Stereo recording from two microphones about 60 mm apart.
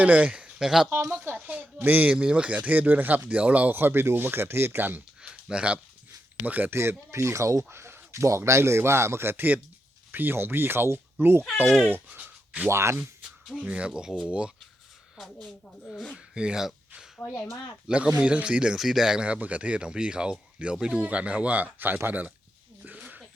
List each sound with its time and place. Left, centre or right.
0.0 s speech: right
1.5 s speech: right
2.1 s speech: centre
3.8 s speech: right
5.2 s a sound: centre
6.4 s speech: right
6.7 s a man's voice: right
7.7 s a man's voice: right
12.1 s a sound: right
12.6 s a man's voice: right
13.6 s speech: centre
15.8 s speech: centre
16.1 s speech: centre
17.8 s speech: centre